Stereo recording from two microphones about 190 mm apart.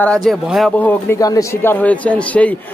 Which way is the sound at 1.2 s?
20° left (ahead or behind).